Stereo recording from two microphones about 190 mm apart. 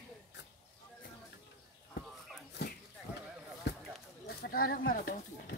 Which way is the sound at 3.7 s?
65° left (ahead or behind).